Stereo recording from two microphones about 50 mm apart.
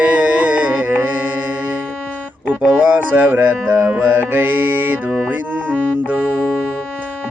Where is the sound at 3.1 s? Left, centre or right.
Right.